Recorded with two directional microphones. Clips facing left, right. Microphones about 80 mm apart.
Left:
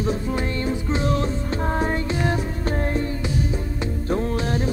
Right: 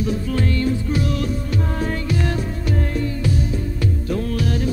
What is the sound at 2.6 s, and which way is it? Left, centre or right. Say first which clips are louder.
Music: right 2 dB; left.